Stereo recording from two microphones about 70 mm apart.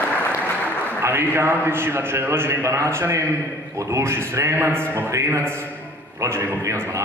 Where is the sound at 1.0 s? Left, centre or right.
Right.